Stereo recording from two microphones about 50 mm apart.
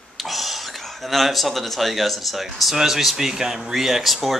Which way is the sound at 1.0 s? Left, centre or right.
Centre.